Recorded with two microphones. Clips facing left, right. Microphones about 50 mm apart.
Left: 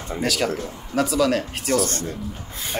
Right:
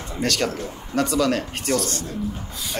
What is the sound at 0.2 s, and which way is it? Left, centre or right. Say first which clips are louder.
Speech: even; centre.